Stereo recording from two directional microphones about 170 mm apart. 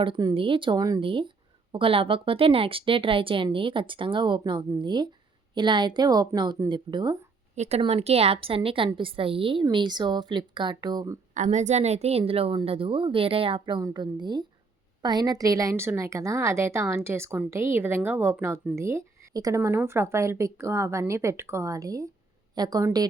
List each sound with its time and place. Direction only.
0.0 s a woman's voice: 25° right (ahead or behind)
7.5 s a woman's voice: 40° right (ahead or behind); by 11.2 s 20° right (ahead or behind)
11.3 s a woman's voice: 45° right (ahead or behind); by 23.0 s 20° right (ahead or behind)